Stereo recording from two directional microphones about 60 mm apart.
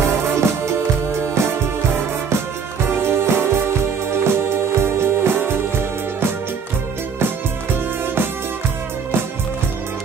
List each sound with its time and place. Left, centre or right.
0.2 s music: right
8.0 s music: right